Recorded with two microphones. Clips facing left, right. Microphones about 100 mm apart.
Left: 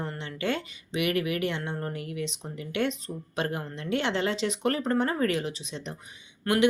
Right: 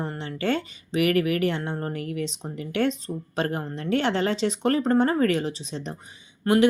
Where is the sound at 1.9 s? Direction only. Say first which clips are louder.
Right 4 dB; 45° right (ahead or behind).